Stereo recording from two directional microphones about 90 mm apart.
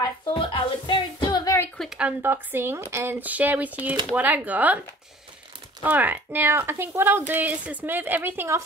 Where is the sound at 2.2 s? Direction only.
25° right (ahead or behind).